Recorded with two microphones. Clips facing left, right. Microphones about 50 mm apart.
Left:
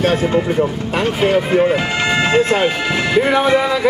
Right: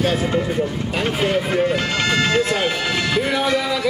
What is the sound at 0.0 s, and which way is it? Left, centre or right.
Speech, left.